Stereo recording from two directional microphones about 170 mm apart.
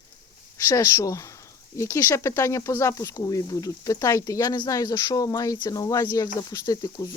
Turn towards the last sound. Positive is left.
turn(degrees=20)  # may be behind; listen again after turning